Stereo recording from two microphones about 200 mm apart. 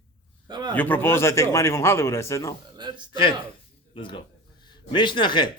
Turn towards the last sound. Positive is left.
turn(degrees=25)  # may be behind; listen again after turning